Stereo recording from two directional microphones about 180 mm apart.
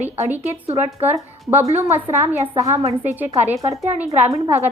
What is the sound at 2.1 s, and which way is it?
A woman's voice, 15° right (ahead or behind).